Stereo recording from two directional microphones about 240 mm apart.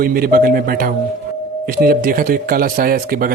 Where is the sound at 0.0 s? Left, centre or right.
Right.